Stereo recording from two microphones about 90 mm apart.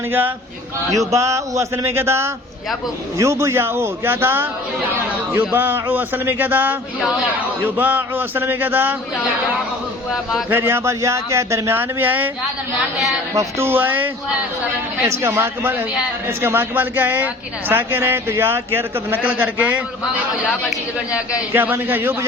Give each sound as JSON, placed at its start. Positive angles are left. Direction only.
{"t": 0.1, "sound": "a man's voice", "side_deg": -20}
{"t": 0.9, "sound": "a man's voice", "side_deg": -35}
{"t": 10.5, "sound": "a man's voice", "side_deg": -25}
{"t": 13.3, "sound": "speech", "side_deg": -35}
{"t": 13.7, "sound": "a man's voice", "side_deg": -20}
{"t": 21.1, "sound": "a man's voice", "side_deg": -15}